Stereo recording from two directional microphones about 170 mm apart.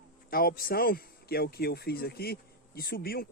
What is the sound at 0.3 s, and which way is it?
Speech, 60° left (ahead or behind).